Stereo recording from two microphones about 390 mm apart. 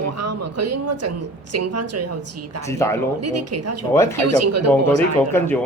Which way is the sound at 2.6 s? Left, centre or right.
Centre.